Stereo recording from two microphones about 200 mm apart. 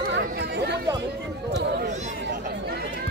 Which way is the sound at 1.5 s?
60° right (ahead or behind).